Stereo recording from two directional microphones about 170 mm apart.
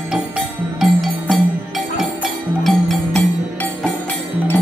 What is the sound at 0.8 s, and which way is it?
Music, 5° right (ahead or behind).